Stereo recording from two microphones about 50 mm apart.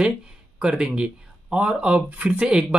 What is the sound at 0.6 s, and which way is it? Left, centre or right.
Speech, centre.